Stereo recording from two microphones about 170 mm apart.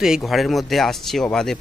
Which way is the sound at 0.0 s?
Centre (ahead or behind).